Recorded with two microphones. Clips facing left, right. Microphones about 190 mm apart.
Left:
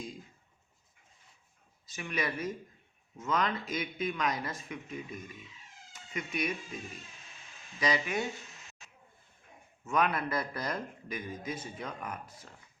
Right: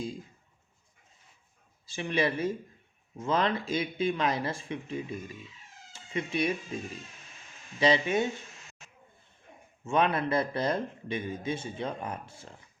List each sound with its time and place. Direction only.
1.9 s speech: 30° right (ahead or behind)
5.9 s cat: 30° right (ahead or behind)
7.8 s speech: 30° right (ahead or behind)
9.8 s speech: 25° right (ahead or behind)